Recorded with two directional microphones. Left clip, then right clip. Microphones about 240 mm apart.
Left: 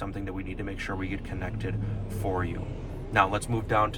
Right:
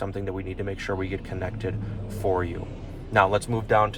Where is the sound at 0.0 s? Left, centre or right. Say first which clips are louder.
Right 5 dB; right.